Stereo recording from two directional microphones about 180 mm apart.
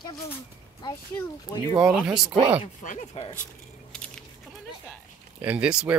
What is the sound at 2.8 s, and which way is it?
Speech, 45° left (ahead or behind).